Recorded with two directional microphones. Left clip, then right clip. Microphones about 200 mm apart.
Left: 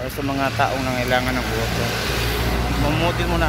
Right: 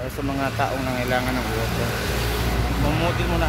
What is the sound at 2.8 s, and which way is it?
Speech, 40° left (ahead or behind).